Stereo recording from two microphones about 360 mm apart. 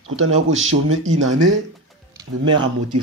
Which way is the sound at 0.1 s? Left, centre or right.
Right.